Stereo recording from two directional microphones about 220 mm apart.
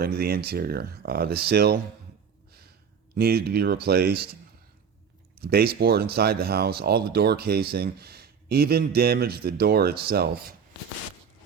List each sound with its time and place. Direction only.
0.0 s speech: 45° right (ahead or behind)
3.2 s speech: 45° right (ahead or behind)
5.4 s speech: 45° right (ahead or behind)